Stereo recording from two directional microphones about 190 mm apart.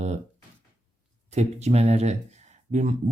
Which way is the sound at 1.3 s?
35° right (ahead or behind).